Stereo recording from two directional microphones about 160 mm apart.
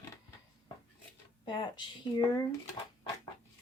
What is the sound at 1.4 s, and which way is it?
Speech, 30° left (ahead or behind).